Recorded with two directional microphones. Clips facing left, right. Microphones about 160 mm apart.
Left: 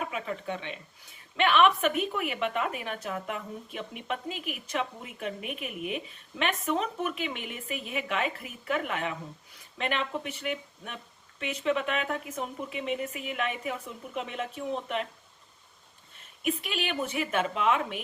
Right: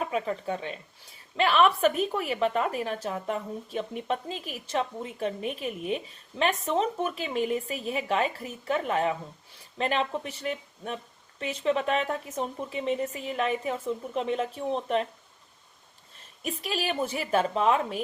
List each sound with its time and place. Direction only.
0.0 s a woman's voice: 35° right (ahead or behind)
16.4 s a woman's voice: 35° right (ahead or behind)